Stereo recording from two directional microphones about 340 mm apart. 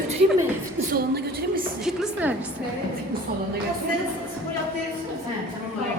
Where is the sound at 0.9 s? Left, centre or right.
Right.